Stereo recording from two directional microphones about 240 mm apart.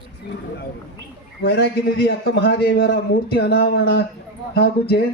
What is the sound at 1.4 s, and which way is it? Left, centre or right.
A man's voice, left.